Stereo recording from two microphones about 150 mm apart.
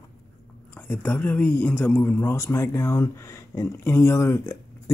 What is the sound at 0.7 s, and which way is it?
Speech, 10° left (ahead or behind).